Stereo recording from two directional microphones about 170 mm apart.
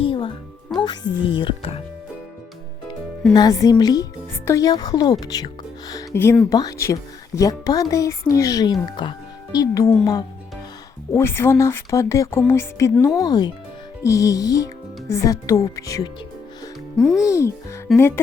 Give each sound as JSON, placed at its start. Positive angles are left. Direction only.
{"t": 0.0, "sound": "music", "side_deg": 30}
{"t": 0.8, "sound": "speech", "side_deg": 25}
{"t": 3.3, "sound": "speech", "side_deg": 20}
{"t": 17.0, "sound": "speech", "side_deg": 5}
{"t": 17.2, "sound": "speech", "side_deg": 15}